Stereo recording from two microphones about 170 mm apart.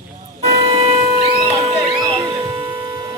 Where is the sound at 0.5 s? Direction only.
30° right (ahead or behind).